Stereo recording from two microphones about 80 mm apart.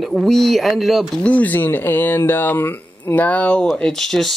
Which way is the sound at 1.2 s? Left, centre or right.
Centre.